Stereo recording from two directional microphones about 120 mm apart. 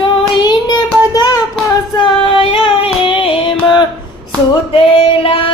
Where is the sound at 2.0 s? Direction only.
50° left (ahead or behind).